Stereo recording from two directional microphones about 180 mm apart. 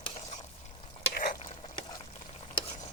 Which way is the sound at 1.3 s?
30° left (ahead or behind).